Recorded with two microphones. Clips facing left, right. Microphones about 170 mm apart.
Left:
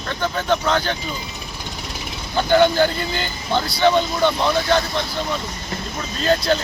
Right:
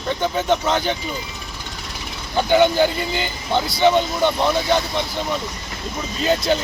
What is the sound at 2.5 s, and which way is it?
Speech, 15° right (ahead or behind).